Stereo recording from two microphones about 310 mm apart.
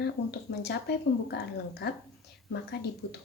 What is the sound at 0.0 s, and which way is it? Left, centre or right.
A woman's voice, left.